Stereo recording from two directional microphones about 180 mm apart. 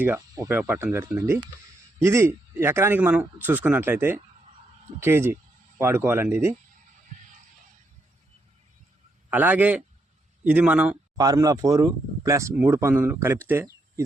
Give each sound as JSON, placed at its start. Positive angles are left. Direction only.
{"t": 0.0, "sound": "speech", "side_deg": -10}
{"t": 9.3, "sound": "speech", "side_deg": -10}
{"t": 11.2, "sound": "speech", "side_deg": -20}